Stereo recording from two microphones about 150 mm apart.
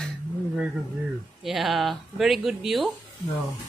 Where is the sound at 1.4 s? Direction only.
Centre (ahead or behind).